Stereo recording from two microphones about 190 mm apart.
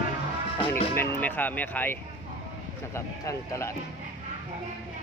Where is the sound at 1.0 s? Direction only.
10° left (ahead or behind).